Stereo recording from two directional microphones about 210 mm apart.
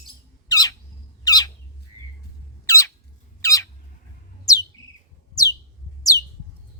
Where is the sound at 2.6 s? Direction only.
15° left (ahead or behind).